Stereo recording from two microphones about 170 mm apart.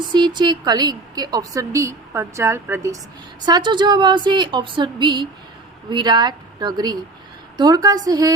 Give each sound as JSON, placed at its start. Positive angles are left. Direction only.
{"t": 0.1, "sound": "a woman's voice", "side_deg": -25}